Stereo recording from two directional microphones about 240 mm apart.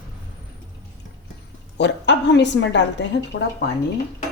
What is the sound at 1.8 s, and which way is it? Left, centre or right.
A woman's voice, left.